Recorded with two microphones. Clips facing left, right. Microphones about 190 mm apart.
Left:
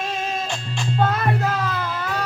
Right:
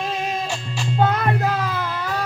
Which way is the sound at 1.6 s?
5° right (ahead or behind).